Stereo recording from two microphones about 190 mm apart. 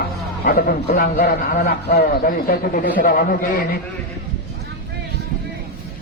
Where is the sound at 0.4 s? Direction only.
50° left (ahead or behind).